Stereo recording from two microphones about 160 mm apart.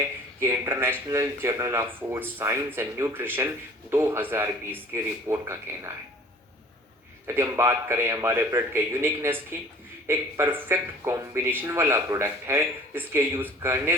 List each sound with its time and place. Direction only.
0.4 s speech: 15° right (ahead or behind)
7.3 s speech: 20° right (ahead or behind)